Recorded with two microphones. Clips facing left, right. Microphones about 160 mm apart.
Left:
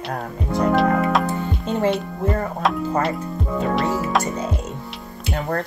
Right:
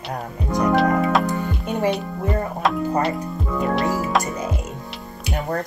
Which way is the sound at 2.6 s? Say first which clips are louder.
Right 1 dB; centre (ahead or behind).